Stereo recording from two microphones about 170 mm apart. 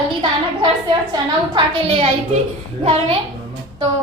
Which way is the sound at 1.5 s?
30° right (ahead or behind).